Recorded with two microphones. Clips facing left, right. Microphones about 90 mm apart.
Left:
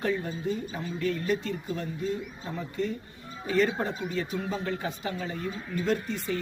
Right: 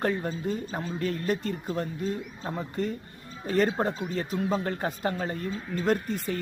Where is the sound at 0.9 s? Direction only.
45° right (ahead or behind).